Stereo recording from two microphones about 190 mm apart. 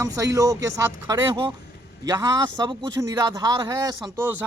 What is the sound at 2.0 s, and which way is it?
A man's voice, 20° right (ahead or behind).